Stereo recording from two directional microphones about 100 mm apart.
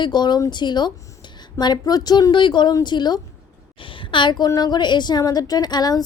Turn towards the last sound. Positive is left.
turn(degrees=45)  # may be behind; listen again after turning